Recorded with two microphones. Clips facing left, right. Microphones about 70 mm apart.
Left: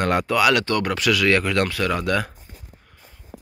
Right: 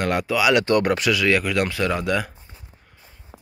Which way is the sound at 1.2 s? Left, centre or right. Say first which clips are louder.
Left 1 dB; centre.